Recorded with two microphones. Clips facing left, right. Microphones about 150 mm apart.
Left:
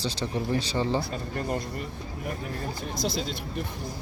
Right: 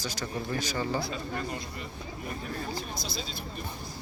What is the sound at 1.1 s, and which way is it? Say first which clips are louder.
Speech: left 4 dB; 50° left (ahead or behind).